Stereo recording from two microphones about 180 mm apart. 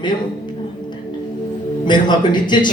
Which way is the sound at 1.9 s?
25° left (ahead or behind).